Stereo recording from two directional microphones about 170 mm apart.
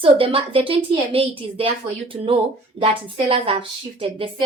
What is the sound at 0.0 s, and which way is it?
A woman's voice, 35° right (ahead or behind).